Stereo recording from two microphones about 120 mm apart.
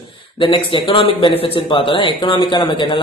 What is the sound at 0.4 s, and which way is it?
A man's voice, 45° left (ahead or behind).